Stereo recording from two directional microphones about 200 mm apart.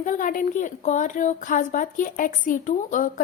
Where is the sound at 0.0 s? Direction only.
40° left (ahead or behind).